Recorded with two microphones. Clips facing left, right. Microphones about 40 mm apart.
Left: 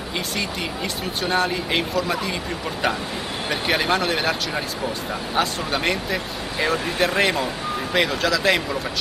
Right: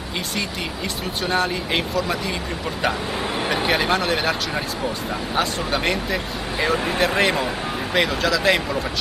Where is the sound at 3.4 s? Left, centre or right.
Centre.